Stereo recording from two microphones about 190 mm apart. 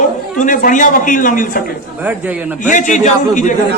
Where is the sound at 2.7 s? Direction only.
40° left (ahead or behind).